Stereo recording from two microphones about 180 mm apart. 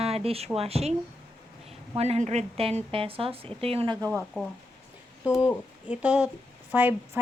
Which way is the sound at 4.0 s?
15° right (ahead or behind).